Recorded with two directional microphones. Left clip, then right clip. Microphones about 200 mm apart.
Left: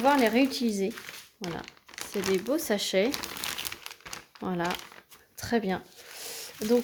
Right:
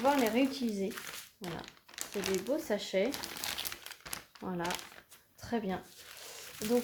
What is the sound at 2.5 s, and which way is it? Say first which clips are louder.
Speech: left 6 dB; 50° left (ahead or behind).